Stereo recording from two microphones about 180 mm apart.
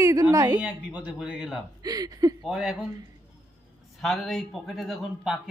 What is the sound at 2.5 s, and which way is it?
Speech, 5° right (ahead or behind).